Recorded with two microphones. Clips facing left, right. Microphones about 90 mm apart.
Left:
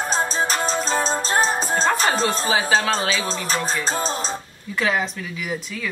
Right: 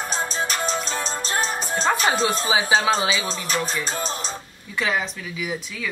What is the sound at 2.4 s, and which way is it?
Speech, 15° right (ahead or behind).